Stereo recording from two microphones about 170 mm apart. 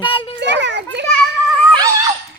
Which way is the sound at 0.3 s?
90° right.